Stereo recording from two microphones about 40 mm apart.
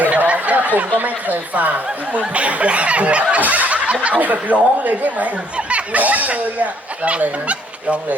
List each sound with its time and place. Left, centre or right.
0.2 s speech: right
2.1 s speech: right
3.4 s fowl: right
4.0 s speech: right
5.5 s speech: right
6.0 s speech: right